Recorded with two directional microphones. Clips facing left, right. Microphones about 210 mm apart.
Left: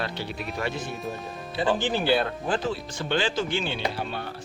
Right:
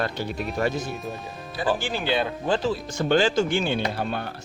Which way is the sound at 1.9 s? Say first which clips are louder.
Left 3 dB; 15° left (ahead or behind).